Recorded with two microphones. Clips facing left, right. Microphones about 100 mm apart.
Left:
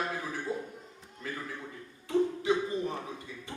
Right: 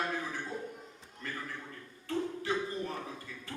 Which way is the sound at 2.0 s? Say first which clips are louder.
Left 7 dB; 15° left (ahead or behind).